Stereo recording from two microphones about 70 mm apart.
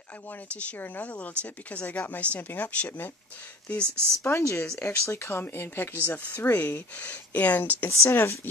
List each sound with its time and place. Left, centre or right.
0.5 s speech: centre
3.8 s speech: right
4.2 s speech: left
7.9 s speech: left